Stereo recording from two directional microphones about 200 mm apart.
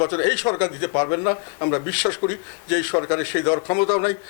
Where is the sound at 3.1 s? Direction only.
15° left (ahead or behind).